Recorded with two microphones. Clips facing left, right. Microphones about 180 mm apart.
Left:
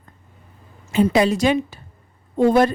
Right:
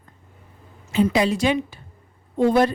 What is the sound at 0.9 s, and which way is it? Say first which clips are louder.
A woman's voice: left 3 dB; 50° left (ahead or behind).